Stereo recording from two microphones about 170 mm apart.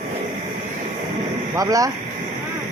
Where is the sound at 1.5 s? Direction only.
20° right (ahead or behind).